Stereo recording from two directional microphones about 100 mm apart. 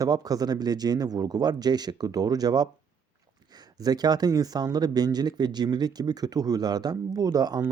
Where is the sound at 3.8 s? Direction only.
40° right (ahead or behind).